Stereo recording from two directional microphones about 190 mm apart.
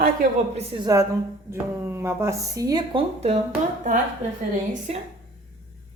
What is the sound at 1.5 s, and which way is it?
Speech, 15° right (ahead or behind).